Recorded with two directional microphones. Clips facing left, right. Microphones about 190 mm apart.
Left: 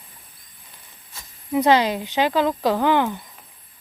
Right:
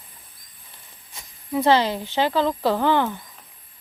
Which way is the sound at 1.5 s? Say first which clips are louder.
Left 1 dB; 15° left (ahead or behind).